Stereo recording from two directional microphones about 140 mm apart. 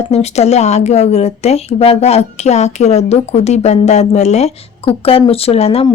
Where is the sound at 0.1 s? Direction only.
50° left (ahead or behind).